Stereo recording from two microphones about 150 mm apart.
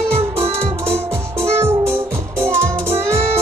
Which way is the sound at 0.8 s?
15° right (ahead or behind).